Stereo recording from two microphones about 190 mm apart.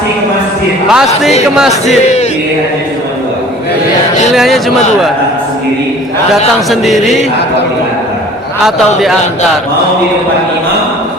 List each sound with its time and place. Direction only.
0.9 s music: 5° right (ahead or behind)
1.9 s male singing: 35° left (ahead or behind)
4.3 s a man's voice: centre (ahead or behind)
6.3 s music: centre (ahead or behind)